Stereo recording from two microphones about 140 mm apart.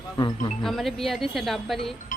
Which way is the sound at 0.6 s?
Centre (ahead or behind).